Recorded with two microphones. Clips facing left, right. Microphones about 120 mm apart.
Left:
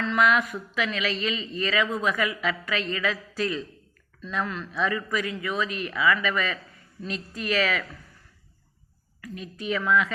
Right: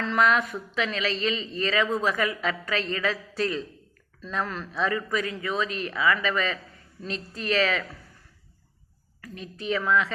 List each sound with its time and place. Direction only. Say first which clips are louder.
0.2 s speech: even; 35° right (ahead or behind)
9.2 s speech: even; 35° right (ahead or behind)